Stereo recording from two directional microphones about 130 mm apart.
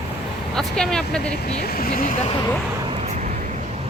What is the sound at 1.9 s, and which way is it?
Speech, 90° left.